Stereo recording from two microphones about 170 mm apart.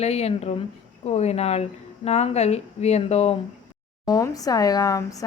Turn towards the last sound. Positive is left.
turn(degrees=20)  # may be behind; listen again after turning